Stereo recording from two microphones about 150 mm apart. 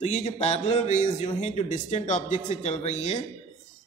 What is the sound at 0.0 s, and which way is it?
A man's voice, 50° left (ahead or behind).